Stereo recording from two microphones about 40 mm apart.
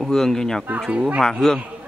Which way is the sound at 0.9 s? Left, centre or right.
Right.